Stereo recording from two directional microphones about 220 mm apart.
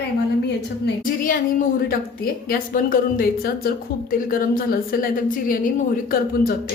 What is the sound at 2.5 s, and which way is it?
A woman's voice, 40° left (ahead or behind).